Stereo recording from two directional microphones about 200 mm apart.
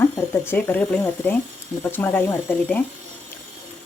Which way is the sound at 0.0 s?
10° left (ahead or behind).